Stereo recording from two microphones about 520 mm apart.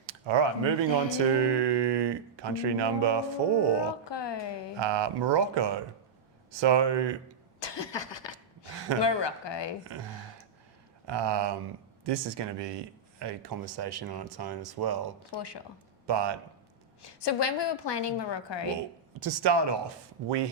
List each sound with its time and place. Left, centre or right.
0.0 s speech: right
4.0 s speech: left
4.8 s speech: right
7.6 s a sound: left
9.0 s speech: left
11.0 s speech: right
15.2 s a woman's voice: left
16.0 s speech: right
17.2 s a woman's voice: left
19.2 s speech: right